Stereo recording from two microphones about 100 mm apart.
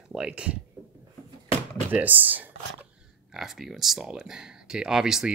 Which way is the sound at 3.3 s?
5° right (ahead or behind).